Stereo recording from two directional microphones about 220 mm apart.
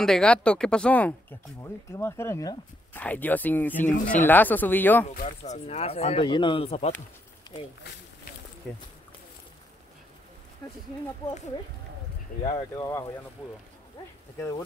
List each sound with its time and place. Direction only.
0.0 s speech: 5° left (ahead or behind)
5.0 s speech: 35° left (ahead or behind)
7.5 s a sound: 15° left (ahead or behind)
12.4 s speech: 20° left (ahead or behind)